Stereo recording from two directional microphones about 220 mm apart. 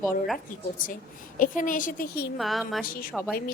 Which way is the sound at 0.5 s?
40° left (ahead or behind).